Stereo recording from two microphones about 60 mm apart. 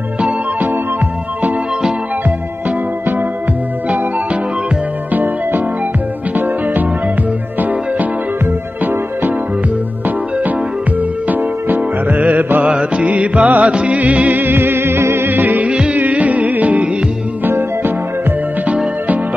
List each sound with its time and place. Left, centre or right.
0.2 s music: right
5.1 s music: right
11.2 s music: right
17.5 s music: right